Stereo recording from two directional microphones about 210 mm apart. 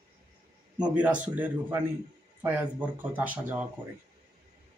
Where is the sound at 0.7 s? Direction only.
5° right (ahead or behind).